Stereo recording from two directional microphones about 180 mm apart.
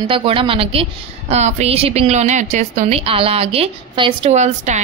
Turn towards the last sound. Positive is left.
turn(degrees=-40)  # may be behind; listen again after turning